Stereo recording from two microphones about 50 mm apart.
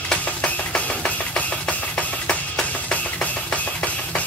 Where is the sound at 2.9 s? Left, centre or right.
Left.